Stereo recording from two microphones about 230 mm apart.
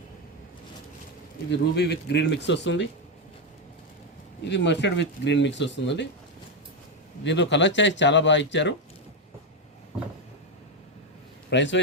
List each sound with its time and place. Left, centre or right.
1.5 s speech: left
4.4 s speech: left
7.3 s speech: left
11.5 s speech: left